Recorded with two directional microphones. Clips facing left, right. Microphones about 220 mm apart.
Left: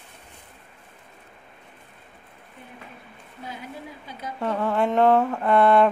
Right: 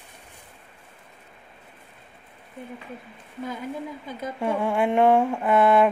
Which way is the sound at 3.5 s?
50° right (ahead or behind).